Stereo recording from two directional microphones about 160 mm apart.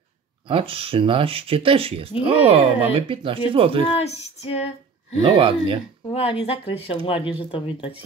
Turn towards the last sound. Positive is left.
turn(degrees=35)  # may be behind; listen again after turning